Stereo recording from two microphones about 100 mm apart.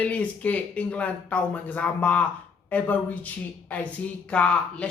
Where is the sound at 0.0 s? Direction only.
15° left (ahead or behind).